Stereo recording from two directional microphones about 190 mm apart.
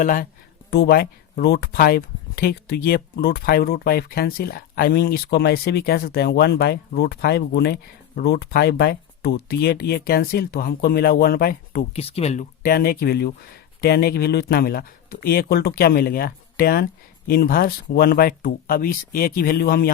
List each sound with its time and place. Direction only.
0.0 s speech: 45° left (ahead or behind)
0.7 s speech: 55° left (ahead or behind)
11.9 s speech: 30° left (ahead or behind)
12.6 s speech: 55° left (ahead or behind)